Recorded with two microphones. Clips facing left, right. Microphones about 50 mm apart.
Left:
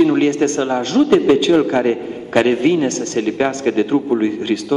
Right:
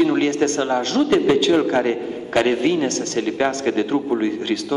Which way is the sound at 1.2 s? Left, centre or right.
Left.